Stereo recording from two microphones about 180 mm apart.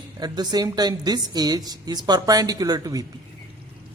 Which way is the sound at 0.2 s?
20° right (ahead or behind).